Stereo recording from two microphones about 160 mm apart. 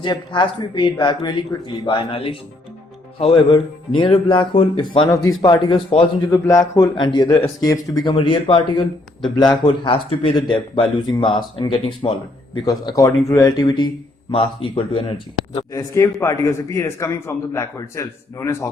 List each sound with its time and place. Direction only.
0.0 s speech: 30° left (ahead or behind)
6.3 s speech: 20° left (ahead or behind)
7.3 s speech: 15° left (ahead or behind); by 11.9 s 30° left (ahead or behind)
12.8 s speech: 20° left (ahead or behind)
15.5 s a man's voice: 20° left (ahead or behind)